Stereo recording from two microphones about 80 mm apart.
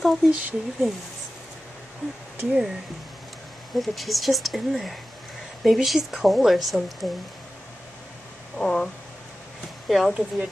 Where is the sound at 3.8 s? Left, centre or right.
Centre.